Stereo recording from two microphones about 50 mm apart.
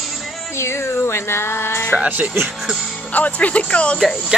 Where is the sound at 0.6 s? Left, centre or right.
Left.